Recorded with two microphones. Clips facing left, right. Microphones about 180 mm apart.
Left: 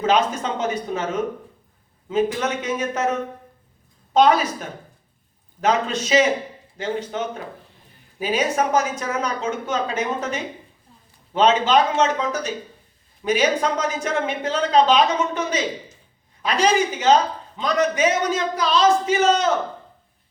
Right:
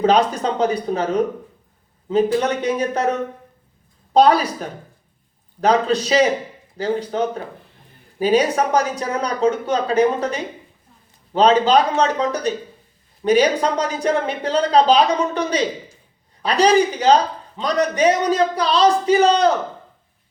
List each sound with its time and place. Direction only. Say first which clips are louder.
0.0 s a woman's voice: right 4 dB; 35° right (ahead or behind)